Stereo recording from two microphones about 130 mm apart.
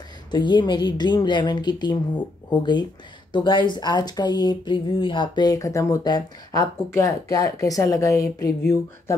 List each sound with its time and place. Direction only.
0.3 s a woman's voice: 35° left (ahead or behind)